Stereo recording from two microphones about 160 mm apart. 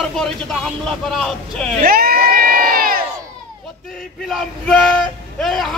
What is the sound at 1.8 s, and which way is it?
Crowd, 70° right (ahead or behind).